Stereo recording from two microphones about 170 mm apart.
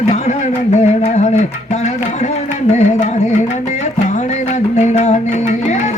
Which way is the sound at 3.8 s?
45° left (ahead or behind).